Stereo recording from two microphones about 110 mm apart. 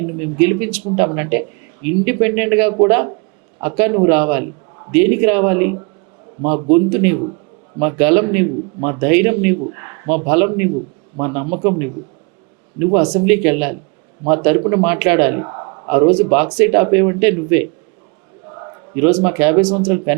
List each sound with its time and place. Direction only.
0.0 s a man's voice: 20° right (ahead or behind)
18.4 s a man's voice: 35° right (ahead or behind)